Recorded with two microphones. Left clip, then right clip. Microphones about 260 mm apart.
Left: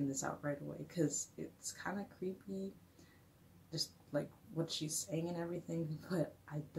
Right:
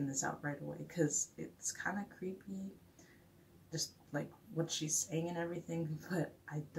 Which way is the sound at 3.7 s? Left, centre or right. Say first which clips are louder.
Left 1 dB; centre.